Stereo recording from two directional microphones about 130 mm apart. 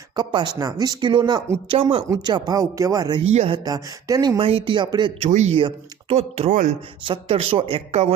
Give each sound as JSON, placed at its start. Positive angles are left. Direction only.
{"t": 0.2, "sound": "speech", "side_deg": -35}
{"t": 2.0, "sound": "speech", "side_deg": -30}
{"t": 3.2, "sound": "speech", "side_deg": -55}
{"t": 3.5, "sound": "speech", "side_deg": -30}
{"t": 4.4, "sound": "speech", "side_deg": -45}
{"t": 5.2, "sound": "speech", "side_deg": -60}
{"t": 5.5, "sound": "speech", "side_deg": -45}